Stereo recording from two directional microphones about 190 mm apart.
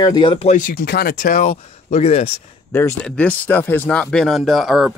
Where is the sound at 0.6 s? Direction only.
50° left (ahead or behind).